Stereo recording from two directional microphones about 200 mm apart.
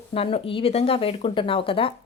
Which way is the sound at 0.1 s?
30° left (ahead or behind).